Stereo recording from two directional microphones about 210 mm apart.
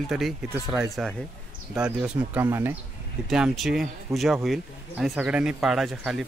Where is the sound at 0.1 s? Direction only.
5° right (ahead or behind).